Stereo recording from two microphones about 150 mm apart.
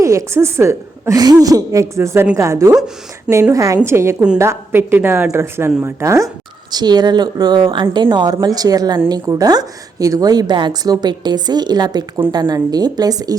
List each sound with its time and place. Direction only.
0.0 s a woman's voice: 20° right (ahead or behind)